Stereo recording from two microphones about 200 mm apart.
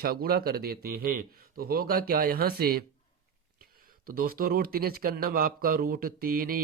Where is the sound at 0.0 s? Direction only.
50° right (ahead or behind).